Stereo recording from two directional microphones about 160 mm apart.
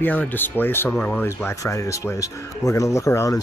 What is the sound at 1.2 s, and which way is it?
Speech, 15° left (ahead or behind).